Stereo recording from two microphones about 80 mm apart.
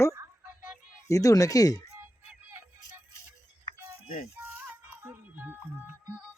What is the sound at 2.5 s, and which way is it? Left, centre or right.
Music, right.